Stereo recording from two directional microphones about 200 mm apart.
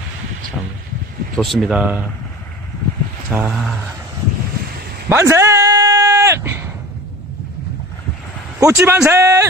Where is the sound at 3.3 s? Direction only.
10° right (ahead or behind).